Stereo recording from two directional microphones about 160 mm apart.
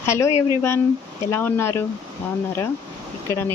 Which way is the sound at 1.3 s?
15° left (ahead or behind).